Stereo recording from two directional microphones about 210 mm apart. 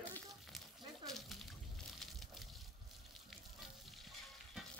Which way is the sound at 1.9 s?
Centre (ahead or behind).